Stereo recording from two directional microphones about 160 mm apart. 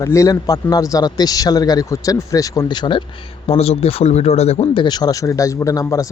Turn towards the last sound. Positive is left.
turn(degrees=20)  # may be behind; listen again after turning